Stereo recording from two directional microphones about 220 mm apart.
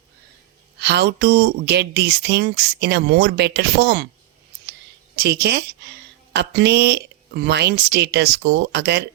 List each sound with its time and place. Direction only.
0.8 s speech: 50° right (ahead or behind)
5.1 s speech: 45° right (ahead or behind)